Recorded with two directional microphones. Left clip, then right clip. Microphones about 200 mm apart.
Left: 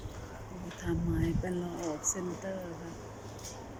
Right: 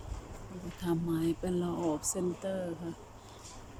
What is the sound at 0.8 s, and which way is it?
Speech, 15° right (ahead or behind).